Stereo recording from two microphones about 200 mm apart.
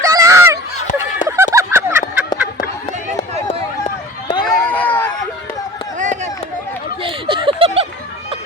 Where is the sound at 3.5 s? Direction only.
25° left (ahead or behind).